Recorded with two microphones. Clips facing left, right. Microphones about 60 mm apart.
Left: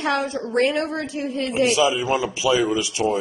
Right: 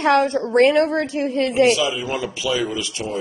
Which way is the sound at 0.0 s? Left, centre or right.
Right.